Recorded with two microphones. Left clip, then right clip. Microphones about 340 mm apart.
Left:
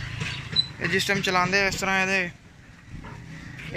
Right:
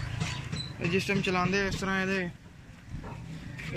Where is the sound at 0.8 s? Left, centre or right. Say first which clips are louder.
Left 6 dB; centre.